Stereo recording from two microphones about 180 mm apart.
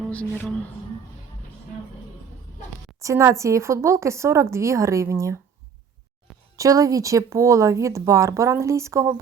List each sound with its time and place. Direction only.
0.1 s speech: 5° left (ahead or behind)
3.0 s speech: 15° right (ahead or behind)
6.6 s speech: 20° right (ahead or behind)